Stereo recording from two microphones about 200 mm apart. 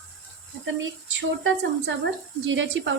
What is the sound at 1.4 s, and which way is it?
A woman's voice, 65° right (ahead or behind).